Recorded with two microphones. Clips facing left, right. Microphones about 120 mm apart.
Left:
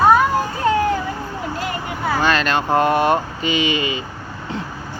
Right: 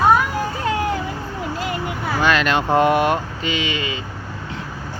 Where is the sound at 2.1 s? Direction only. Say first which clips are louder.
Right 1 dB; 10° right (ahead or behind).